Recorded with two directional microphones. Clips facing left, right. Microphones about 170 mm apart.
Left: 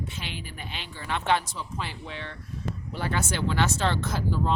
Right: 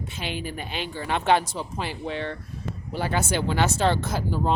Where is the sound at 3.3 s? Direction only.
10° right (ahead or behind).